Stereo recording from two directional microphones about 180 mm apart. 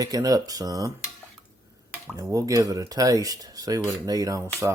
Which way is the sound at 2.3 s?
20° right (ahead or behind).